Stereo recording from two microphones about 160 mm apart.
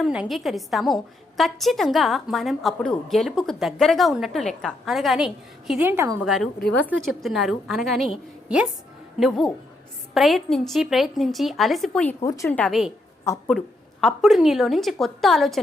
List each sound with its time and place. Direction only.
0.0 s a woman's voice: 5° right (ahead or behind)
5.8 s a woman's voice: 15° right (ahead or behind)
6.2 s a woman's voice: 5° right (ahead or behind)
6.7 s a woman's voice: 10° left (ahead or behind)
12.2 s speech: 20° left (ahead or behind)
12.5 s a woman's voice: centre (ahead or behind)
14.0 s a woman's voice: centre (ahead or behind)